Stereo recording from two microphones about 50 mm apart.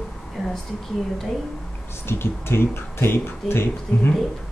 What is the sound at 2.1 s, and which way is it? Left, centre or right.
Speech, left.